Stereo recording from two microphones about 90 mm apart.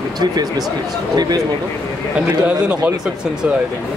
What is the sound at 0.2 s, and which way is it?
Speech, 50° right (ahead or behind).